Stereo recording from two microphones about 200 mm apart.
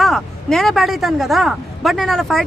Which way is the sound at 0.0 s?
Centre (ahead or behind).